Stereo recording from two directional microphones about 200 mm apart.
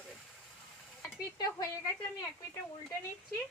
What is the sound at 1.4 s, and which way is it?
Speech, 20° left (ahead or behind).